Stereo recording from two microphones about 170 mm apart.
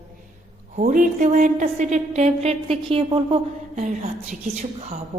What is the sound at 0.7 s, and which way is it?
A woman's voice, 45° right (ahead or behind).